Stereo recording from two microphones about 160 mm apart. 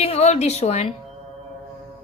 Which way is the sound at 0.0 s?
40° left (ahead or behind).